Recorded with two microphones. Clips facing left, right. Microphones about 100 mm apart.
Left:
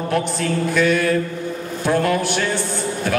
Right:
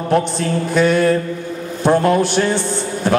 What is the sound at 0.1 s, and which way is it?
A man's voice, 30° right (ahead or behind).